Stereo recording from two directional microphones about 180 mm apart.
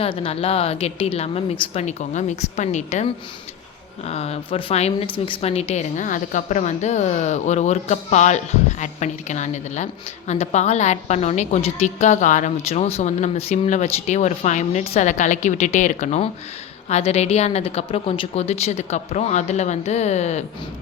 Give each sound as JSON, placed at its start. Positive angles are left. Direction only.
{"t": 0.0, "sound": "a woman's voice", "side_deg": 30}